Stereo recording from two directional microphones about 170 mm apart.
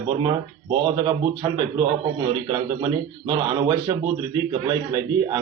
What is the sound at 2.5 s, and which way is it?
Speech, 25° right (ahead or behind).